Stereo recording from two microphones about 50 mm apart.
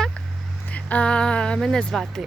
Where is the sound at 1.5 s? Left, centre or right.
Centre.